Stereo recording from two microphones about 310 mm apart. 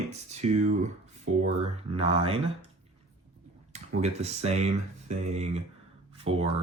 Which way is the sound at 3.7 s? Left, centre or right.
Right.